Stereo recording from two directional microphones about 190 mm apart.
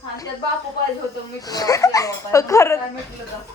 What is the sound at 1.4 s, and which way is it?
A woman's voice, 20° left (ahead or behind).